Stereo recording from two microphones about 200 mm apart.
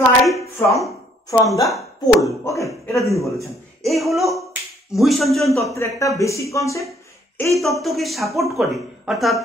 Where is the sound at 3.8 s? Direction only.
Centre (ahead or behind).